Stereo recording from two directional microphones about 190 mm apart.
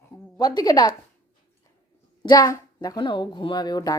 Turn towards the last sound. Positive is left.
turn(degrees=20)  # may be behind; listen again after turning